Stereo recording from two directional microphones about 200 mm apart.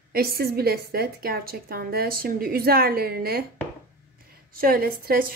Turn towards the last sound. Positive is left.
turn(degrees=-45)  # may be behind; listen again after turning